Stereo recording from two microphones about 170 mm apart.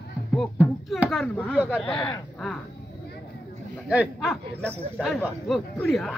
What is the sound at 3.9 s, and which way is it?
Speech, 5° right (ahead or behind).